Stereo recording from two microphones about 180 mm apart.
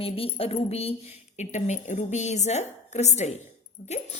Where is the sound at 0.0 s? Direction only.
30° left (ahead or behind).